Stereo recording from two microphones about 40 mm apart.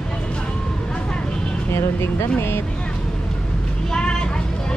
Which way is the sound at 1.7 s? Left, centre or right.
Left.